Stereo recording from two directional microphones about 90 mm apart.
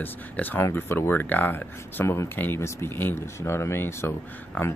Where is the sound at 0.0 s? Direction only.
20° left (ahead or behind).